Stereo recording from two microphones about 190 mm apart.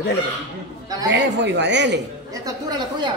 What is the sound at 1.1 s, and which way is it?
Speech, 65° right (ahead or behind).